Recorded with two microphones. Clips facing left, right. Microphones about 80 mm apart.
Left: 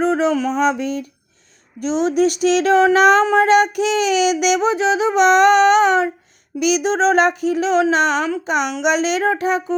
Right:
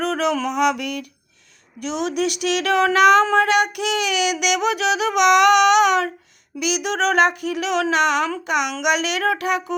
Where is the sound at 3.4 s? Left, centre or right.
Left.